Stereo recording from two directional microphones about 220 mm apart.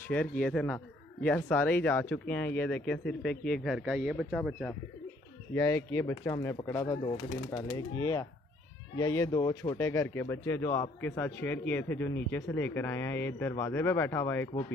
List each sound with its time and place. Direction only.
0.1 s speech: 5° left (ahead or behind)
5.5 s speech: 15° left (ahead or behind)